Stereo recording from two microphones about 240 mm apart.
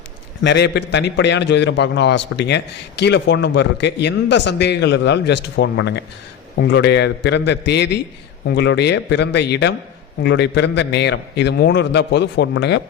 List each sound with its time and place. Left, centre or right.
0.4 s a man's voice: left